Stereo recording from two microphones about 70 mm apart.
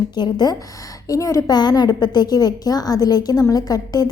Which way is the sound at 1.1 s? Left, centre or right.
Left.